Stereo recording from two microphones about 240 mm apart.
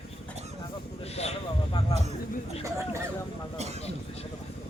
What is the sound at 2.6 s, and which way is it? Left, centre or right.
Speech, centre.